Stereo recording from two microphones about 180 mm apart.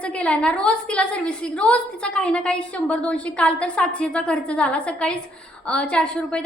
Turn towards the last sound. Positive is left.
turn(degrees=5)  # may be behind; listen again after turning